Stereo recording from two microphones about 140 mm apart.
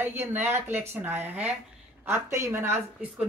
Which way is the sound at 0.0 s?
15° right (ahead or behind).